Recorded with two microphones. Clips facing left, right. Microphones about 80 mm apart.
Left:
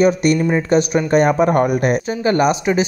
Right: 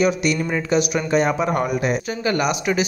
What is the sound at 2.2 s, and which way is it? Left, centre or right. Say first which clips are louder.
Speech: left 5 dB; left.